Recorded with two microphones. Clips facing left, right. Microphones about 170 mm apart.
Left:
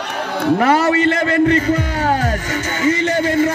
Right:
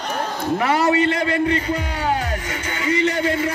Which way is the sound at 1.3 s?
45° left (ahead or behind).